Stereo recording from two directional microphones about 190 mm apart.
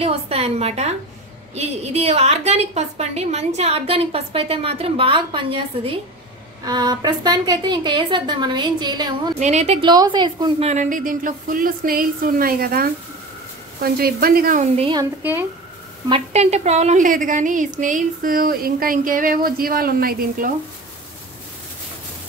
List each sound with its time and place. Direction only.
0.0 s a woman's voice: 30° right (ahead or behind)
9.4 s a woman's voice: 35° right (ahead or behind)
9.8 s a woman's voice: 20° right (ahead or behind)
10.7 s a woman's voice: 40° right (ahead or behind)
16.1 s a woman's voice: 35° right (ahead or behind)